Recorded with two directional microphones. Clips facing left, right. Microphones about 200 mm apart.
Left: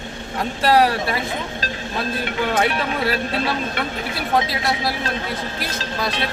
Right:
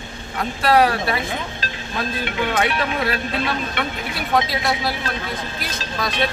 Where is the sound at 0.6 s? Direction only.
35° left (ahead or behind).